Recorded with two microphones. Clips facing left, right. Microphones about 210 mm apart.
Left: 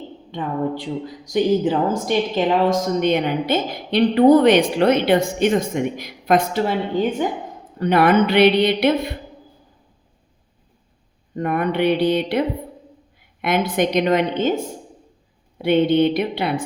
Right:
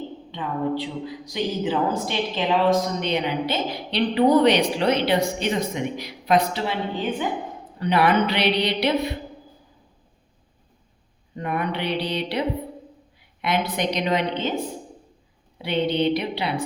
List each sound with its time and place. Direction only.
0.3 s a woman's voice: 50° left (ahead or behind)
7.8 s a woman's voice: 50° left (ahead or behind)
11.3 s a woman's voice: 50° left (ahead or behind)